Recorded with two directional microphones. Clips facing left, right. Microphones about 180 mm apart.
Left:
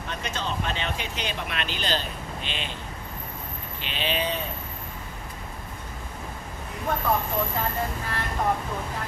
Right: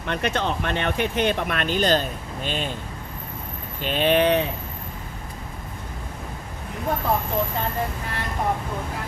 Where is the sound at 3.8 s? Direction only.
50° right (ahead or behind); by 4.4 s 65° right (ahead or behind).